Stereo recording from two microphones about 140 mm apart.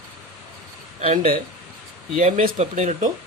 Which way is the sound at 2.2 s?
60° right (ahead or behind).